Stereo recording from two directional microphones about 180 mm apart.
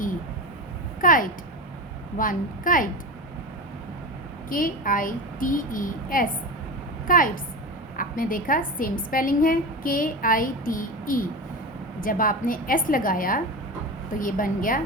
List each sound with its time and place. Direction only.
1.0 s a woman's voice: 50° left (ahead or behind)
4.4 s a woman's voice: 50° left (ahead or behind)